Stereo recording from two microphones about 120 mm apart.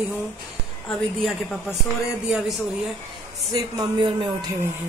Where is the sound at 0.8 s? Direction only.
Centre (ahead or behind).